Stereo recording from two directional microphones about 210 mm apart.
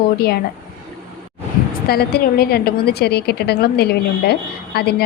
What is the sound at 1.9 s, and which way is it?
A woman's voice, 50° left (ahead or behind).